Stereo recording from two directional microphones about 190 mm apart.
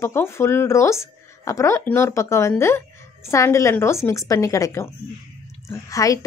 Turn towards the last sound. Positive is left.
turn(degrees=15)  # may be behind; listen again after turning